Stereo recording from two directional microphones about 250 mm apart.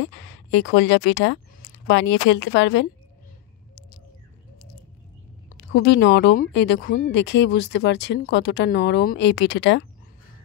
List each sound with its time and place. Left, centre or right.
0.0 s speech: left
5.7 s speech: left